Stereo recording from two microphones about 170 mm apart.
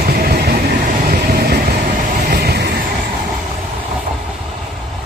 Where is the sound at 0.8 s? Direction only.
65° right (ahead or behind).